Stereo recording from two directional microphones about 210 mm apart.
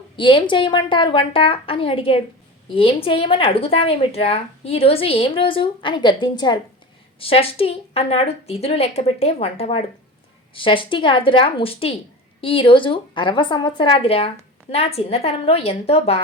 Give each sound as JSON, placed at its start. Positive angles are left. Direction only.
{"t": 0.2, "sound": "a woman's voice", "side_deg": 20}